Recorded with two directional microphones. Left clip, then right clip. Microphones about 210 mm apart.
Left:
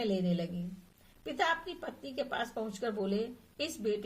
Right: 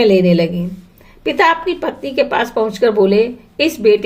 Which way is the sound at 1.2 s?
20° right (ahead or behind).